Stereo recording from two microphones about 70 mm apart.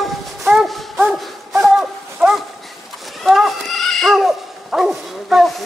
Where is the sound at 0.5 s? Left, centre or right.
Centre.